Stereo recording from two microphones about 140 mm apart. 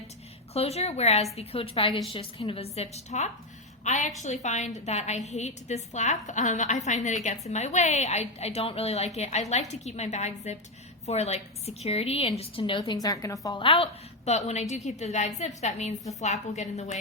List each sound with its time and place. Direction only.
0.5 s a woman's voice: 50° left (ahead or behind)
12.8 s a woman's voice: 30° left (ahead or behind)
13.6 s a woman's voice: 40° left (ahead or behind)